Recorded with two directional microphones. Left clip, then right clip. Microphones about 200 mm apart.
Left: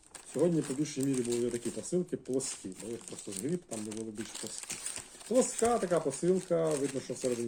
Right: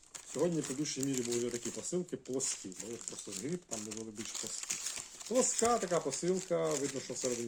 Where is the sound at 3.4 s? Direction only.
5° right (ahead or behind).